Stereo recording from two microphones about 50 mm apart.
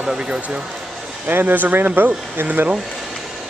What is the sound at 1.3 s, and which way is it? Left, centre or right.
Speech, right.